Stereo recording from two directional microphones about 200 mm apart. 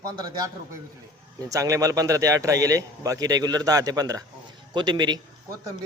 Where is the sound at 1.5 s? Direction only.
15° right (ahead or behind).